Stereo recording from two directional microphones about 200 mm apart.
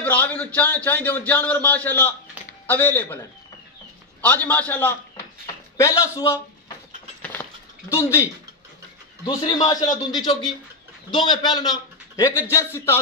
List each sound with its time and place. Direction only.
0.0 s a man's voice: 5° left (ahead or behind)
4.2 s a man's voice: 10° left (ahead or behind)
7.4 s cutlery: 10° left (ahead or behind)
7.9 s a man's voice: 15° left (ahead or behind)